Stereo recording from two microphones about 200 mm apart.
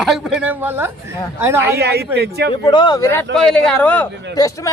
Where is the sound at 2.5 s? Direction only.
25° left (ahead or behind).